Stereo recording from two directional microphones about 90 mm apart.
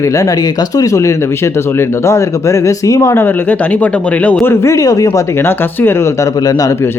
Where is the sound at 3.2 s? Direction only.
20° left (ahead or behind).